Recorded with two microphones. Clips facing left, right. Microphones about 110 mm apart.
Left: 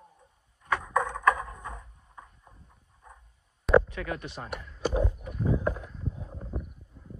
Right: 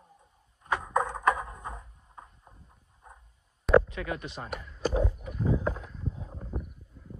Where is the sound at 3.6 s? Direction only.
Centre (ahead or behind).